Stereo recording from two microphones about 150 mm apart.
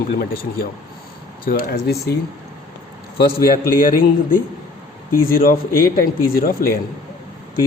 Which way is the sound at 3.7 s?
70° left (ahead or behind).